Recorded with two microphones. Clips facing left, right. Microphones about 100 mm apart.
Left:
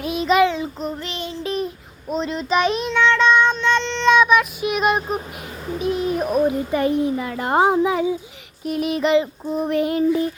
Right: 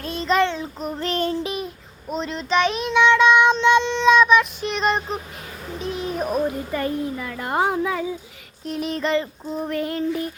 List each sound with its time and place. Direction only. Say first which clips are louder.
0.0 s child singing: left 3 dB; 10° left (ahead or behind)
0.9 s child singing: right 6 dB; 40° right (ahead or behind)
1.5 s child singing: left 5 dB; centre (ahead or behind)
2.9 s child singing: right 2 dB; 15° right (ahead or behind)
4.1 s child singing: even; centre (ahead or behind)
5.9 s a child's voice: left 4 dB; centre (ahead or behind)
6.4 s a child's voice: left 5 dB; 20° left (ahead or behind)
8.6 s child singing: left 4 dB; 5° left (ahead or behind)